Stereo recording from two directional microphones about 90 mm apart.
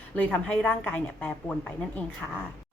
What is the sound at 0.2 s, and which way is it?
A woman's voice, 15° left (ahead or behind).